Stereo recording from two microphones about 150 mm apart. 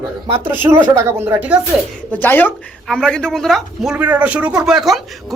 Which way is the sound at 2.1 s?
15° left (ahead or behind).